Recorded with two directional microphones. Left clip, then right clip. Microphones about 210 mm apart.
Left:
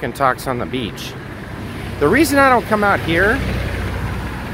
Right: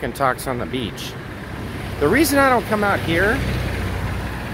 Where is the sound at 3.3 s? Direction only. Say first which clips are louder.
Left 2 dB; 55° right (ahead or behind).